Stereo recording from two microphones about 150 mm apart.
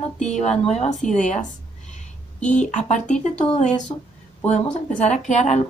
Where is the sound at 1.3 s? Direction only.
55° left (ahead or behind).